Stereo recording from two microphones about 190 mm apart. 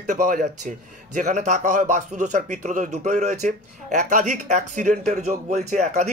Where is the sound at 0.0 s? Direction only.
45° right (ahead or behind).